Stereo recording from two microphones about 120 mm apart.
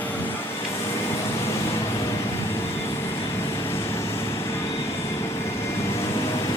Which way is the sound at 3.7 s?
20° left (ahead or behind).